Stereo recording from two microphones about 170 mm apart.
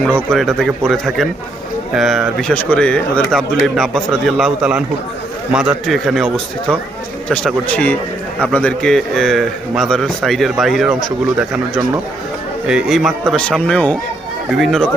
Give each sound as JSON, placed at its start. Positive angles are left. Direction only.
{"t": 0.3, "sound": "a man's voice", "side_deg": 0}